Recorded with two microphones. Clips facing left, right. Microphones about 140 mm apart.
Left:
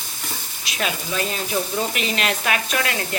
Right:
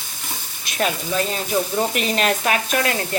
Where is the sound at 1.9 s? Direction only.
45° right (ahead or behind).